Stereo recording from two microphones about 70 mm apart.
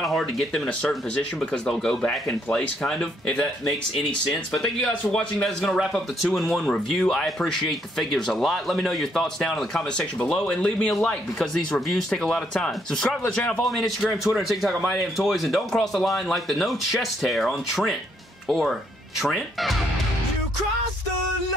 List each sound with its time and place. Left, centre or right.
0.0 s a sound: centre
0.8 s speech: centre
5.1 s speech: centre
13.7 s speech: centre